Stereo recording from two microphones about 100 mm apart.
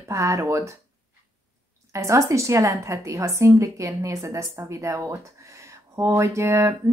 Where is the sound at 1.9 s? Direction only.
30° right (ahead or behind).